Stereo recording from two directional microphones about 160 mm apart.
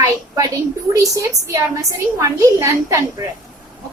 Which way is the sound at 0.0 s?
20° right (ahead or behind).